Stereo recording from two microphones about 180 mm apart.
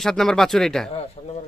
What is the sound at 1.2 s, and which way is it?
Speech, 35° left (ahead or behind).